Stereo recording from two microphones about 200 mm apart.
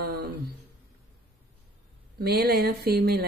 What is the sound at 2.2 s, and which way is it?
Speech, 55° right (ahead or behind).